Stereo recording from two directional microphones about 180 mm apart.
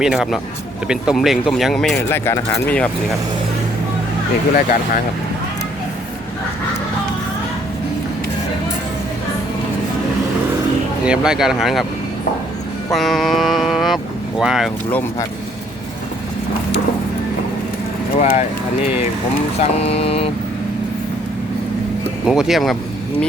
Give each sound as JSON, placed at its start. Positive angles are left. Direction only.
{"t": 0.0, "sound": "speech", "side_deg": -5}
{"t": 11.0, "sound": "speech", "side_deg": -5}
{"t": 12.9, "sound": "speech", "side_deg": 0}
{"t": 14.8, "sound": "speech", "side_deg": 10}
{"t": 18.2, "sound": "speech", "side_deg": 40}
{"t": 19.5, "sound": "speech", "side_deg": 35}
{"t": 22.3, "sound": "speech", "side_deg": 0}